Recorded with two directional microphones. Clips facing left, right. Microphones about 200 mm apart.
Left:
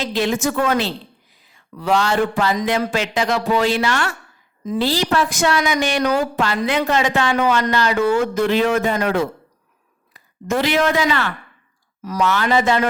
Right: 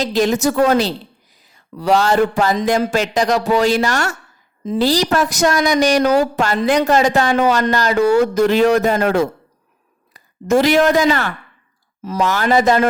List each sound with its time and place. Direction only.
0.0 s a woman's voice: 40° right (ahead or behind)